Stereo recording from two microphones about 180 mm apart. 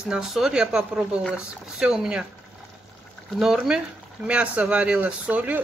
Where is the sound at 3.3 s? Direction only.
Centre (ahead or behind).